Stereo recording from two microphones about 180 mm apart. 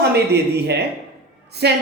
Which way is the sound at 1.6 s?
70° right (ahead or behind).